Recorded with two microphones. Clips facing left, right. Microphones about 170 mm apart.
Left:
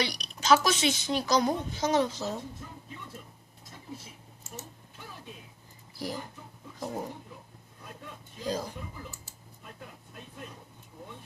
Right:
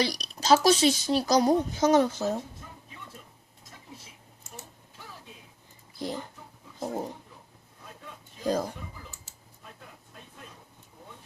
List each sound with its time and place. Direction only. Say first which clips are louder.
0.0 s a woman's voice: right 3 dB; 35° right (ahead or behind)
6.0 s speech: right 2 dB; 25° right (ahead or behind)